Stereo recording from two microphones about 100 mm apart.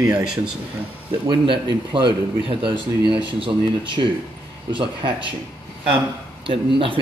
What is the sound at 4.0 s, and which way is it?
Speech, 75° right (ahead or behind).